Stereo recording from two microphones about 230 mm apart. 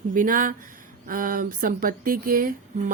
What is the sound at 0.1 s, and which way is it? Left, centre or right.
Speech, right.